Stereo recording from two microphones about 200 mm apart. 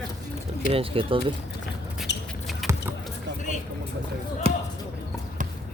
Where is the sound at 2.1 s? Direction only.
60° left (ahead or behind).